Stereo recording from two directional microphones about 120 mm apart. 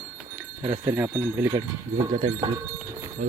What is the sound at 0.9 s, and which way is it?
Speech, 10° right (ahead or behind).